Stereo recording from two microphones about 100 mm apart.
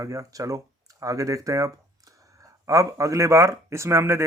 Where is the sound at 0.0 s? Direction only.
35° right (ahead or behind).